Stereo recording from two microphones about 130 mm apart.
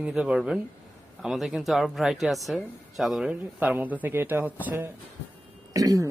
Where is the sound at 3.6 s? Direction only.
15° right (ahead or behind).